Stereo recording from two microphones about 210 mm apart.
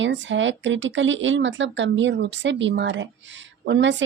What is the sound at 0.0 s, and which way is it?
Speech, 60° right (ahead or behind).